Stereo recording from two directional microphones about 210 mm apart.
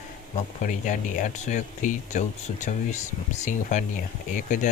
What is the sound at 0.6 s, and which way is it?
Speech, 35° left (ahead or behind).